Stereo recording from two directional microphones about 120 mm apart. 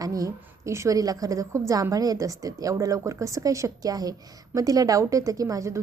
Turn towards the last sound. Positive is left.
turn(degrees=-25)  # may be behind; listen again after turning